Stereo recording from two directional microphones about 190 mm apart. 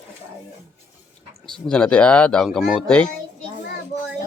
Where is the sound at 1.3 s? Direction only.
25° right (ahead or behind).